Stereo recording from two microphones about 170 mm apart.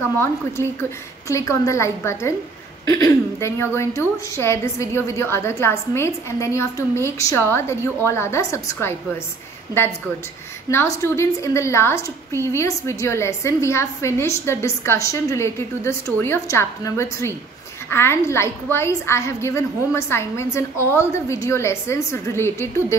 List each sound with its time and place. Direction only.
0.0 s a woman's voice: 15° left (ahead or behind)
10.7 s a woman's voice: 15° left (ahead or behind)